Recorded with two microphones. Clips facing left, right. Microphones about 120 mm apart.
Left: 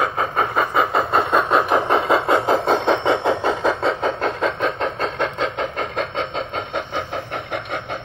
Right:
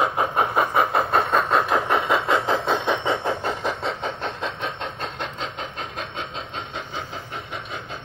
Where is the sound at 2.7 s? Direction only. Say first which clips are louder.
Left 5 dB; 70° left (ahead or behind).